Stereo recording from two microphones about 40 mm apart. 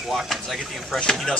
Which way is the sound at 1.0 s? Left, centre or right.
Centre.